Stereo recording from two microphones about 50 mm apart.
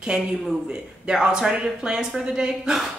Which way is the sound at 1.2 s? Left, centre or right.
Centre.